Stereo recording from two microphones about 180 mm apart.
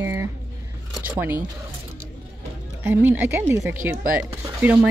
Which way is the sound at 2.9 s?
10° right (ahead or behind).